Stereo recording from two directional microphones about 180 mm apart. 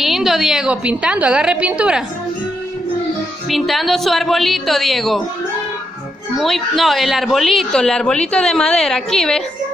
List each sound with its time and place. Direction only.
0.0 s speech: centre (ahead or behind)
3.4 s speech: centre (ahead or behind)
6.3 s speech: centre (ahead or behind)